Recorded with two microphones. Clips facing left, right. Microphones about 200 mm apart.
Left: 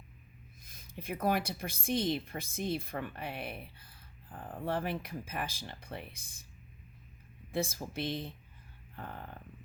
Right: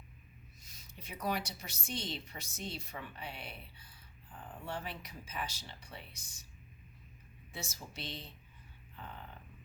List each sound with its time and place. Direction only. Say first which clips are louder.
0.6 s a woman's voice: left 10 dB; 55° left (ahead or behind)
7.5 s a woman's voice: left 12 dB; 55° left (ahead or behind)
9.0 s a sound: left 5 dB; 55° left (ahead or behind)